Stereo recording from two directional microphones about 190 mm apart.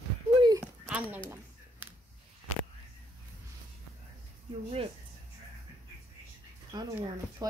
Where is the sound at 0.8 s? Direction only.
5° right (ahead or behind).